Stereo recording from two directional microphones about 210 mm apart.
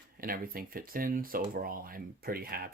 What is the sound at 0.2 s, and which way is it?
Speech, 45° right (ahead or behind).